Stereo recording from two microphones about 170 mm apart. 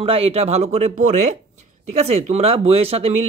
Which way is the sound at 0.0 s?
35° right (ahead or behind).